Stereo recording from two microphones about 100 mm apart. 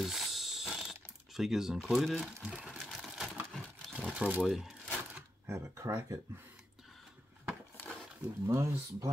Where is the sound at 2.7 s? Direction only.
Centre (ahead or behind).